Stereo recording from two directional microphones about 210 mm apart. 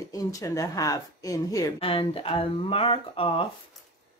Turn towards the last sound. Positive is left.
turn(degrees=25)  # may be behind; listen again after turning